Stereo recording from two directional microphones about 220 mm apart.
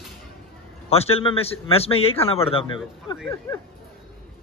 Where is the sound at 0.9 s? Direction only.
25° left (ahead or behind).